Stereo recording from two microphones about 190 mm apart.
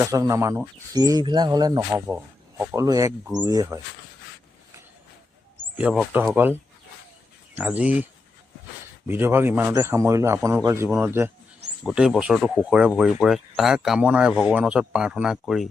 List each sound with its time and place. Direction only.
0.0 s a man's voice: 15° right (ahead or behind)
5.7 s a man's voice: 5° right (ahead or behind)
9.0 s a man's voice: 10° right (ahead or behind)